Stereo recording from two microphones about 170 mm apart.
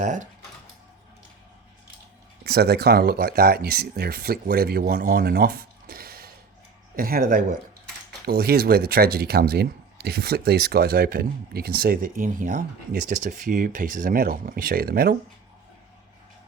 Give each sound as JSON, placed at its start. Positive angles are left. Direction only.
{"t": 0.0, "sound": "speech", "side_deg": -45}
{"t": 2.4, "sound": "speech", "side_deg": -70}
{"t": 8.2, "sound": "speech", "side_deg": -65}